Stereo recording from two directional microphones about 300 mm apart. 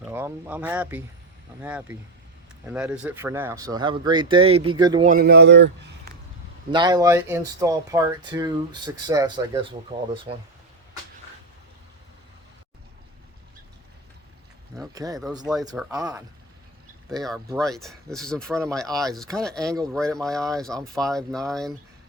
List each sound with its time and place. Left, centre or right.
0.0 s speech: centre
5.0 s speech: right
6.7 s speech: centre
14.9 s speech: centre
17.1 s speech: centre